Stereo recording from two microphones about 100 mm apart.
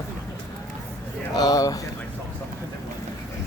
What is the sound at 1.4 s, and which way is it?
Speech, 35° left (ahead or behind).